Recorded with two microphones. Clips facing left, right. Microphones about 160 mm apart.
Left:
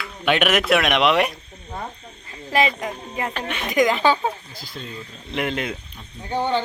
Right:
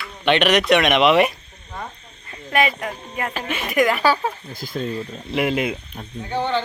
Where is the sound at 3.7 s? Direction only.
20° left (ahead or behind).